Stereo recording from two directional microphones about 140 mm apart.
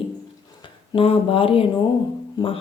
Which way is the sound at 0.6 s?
40° left (ahead or behind).